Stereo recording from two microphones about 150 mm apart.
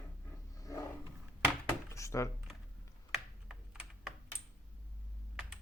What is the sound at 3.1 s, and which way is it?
Computer keyboard, 5° right (ahead or behind).